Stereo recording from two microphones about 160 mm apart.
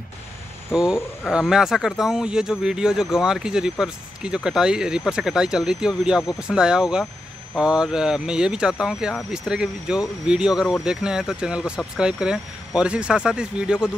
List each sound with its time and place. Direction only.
0.7 s speech: centre (ahead or behind)